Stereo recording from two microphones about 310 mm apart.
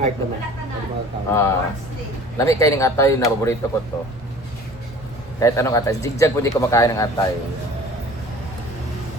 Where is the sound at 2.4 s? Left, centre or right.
Centre.